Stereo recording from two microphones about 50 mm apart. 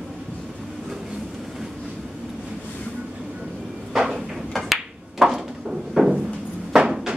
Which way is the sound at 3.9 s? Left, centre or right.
Centre.